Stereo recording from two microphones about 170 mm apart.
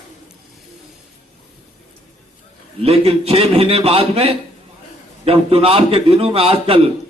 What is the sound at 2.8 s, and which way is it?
A man's voice, 35° right (ahead or behind).